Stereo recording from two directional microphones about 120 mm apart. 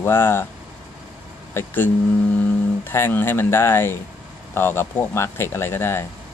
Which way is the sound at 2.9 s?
20° left (ahead or behind).